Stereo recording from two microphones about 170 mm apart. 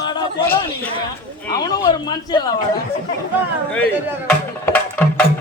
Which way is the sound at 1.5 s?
25° left (ahead or behind).